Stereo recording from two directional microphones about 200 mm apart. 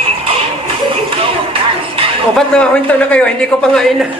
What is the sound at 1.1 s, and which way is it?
Music, 25° right (ahead or behind).